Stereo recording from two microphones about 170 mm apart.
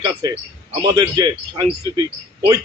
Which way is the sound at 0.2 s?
25° right (ahead or behind).